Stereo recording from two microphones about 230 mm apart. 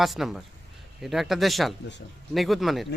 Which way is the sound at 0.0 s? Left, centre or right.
Centre.